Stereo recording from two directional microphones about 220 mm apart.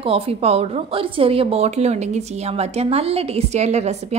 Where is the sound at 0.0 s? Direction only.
25° right (ahead or behind).